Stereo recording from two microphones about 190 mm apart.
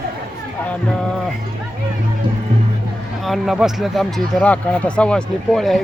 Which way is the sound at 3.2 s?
Centre (ahead or behind).